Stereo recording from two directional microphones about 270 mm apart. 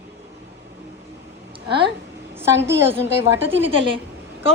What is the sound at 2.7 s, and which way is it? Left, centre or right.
Speech, centre.